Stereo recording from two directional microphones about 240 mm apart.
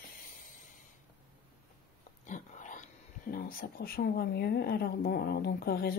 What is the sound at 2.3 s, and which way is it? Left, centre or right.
Speech, left.